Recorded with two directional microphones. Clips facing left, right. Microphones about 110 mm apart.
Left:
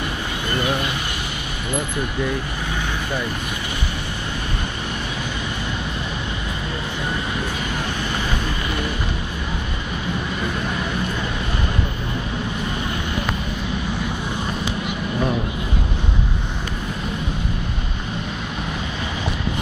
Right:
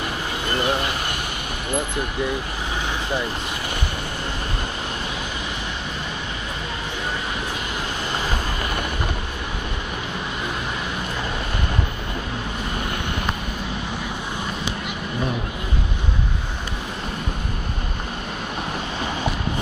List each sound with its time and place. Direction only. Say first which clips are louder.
0.6 s vehicle: even; 35° right (ahead or behind)